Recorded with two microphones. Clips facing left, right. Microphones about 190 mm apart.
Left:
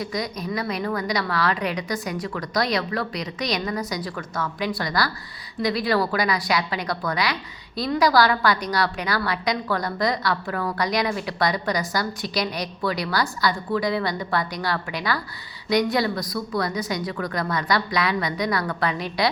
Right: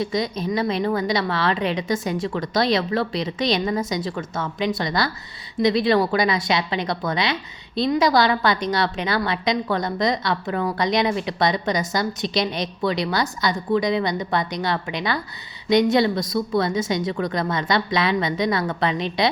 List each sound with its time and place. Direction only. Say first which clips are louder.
0.0 s a woman's voice: right 5 dB; 25° right (ahead or behind)